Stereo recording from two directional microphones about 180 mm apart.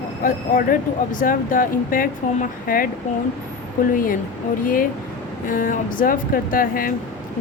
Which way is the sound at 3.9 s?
50° left (ahead or behind).